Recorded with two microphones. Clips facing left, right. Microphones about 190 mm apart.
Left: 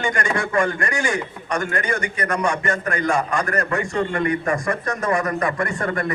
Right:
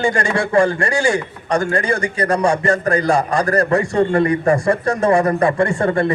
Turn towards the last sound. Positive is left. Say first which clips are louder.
# right 7 dB
turn(degrees=-30)  # may be behind; listen again after turning